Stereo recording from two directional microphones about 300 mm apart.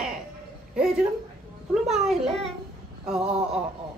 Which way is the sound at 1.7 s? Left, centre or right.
Centre.